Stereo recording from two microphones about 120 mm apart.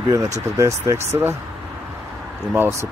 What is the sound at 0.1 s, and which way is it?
Speech, 25° right (ahead or behind).